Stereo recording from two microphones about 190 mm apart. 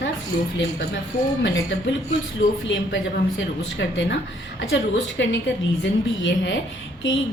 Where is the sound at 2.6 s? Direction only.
75° left (ahead or behind).